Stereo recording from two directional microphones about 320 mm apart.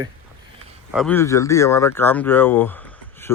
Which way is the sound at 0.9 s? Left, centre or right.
Centre.